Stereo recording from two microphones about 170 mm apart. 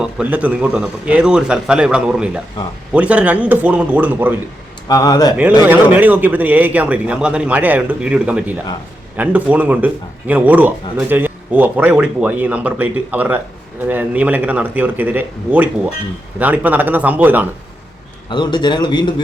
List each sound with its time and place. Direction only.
0.0 s a man's voice: 5° right (ahead or behind)
4.9 s a man's voice: 20° left (ahead or behind)
5.6 s speech: 10° right (ahead or behind)
18.3 s a man's voice: 25° left (ahead or behind)